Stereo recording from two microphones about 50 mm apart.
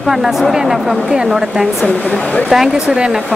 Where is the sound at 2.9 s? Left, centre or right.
Centre.